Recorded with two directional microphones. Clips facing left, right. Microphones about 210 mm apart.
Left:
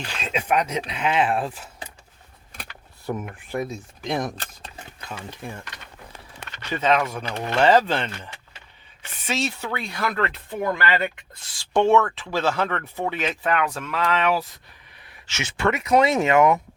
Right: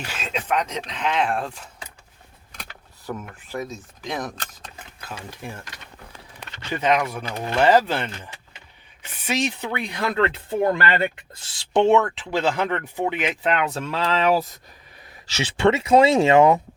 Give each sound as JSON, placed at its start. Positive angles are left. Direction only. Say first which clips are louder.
{"t": 0.0, "sound": "speech", "louder": "even", "side_deg": -5}
{"t": 0.3, "sound": "speech", "louder": "left 2 dB", "side_deg": 10}
{"t": 3.2, "sound": "speech", "louder": "left 3 dB", "side_deg": 10}
{"t": 4.9, "sound": "stir", "louder": "even", "side_deg": -5}
{"t": 6.7, "sound": "speech", "louder": "even", "side_deg": -10}